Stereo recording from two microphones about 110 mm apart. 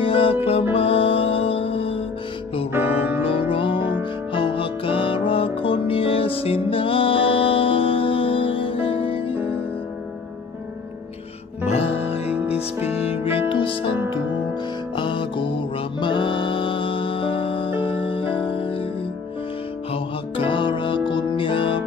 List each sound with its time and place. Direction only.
0.0 s music: 55° left (ahead or behind)
2.7 s music: 15° right (ahead or behind)
3.4 s music: 50° left (ahead or behind)
11.6 s music: 65° left (ahead or behind)
12.3 s music: 10° right (ahead or behind)
13.0 s music: 60° left (ahead or behind)
13.5 s music: 50° left (ahead or behind)
15.0 s music: 45° left (ahead or behind)
19.9 s music: 50° left (ahead or behind)